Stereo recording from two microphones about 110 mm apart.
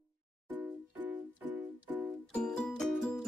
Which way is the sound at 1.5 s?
15° right (ahead or behind).